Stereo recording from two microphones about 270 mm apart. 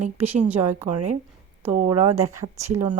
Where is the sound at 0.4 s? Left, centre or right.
Centre.